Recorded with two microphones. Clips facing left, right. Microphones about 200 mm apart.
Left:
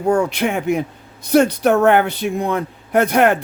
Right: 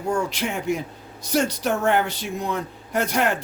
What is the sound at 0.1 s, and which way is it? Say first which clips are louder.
Speech: left 8 dB; 60° left (ahead or behind).